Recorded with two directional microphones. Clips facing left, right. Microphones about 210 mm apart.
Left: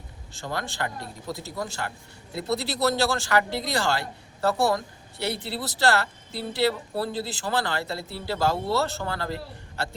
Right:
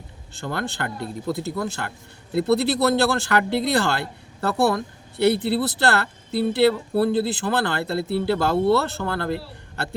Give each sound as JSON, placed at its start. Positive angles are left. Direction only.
{"t": 0.3, "sound": "speech", "side_deg": -60}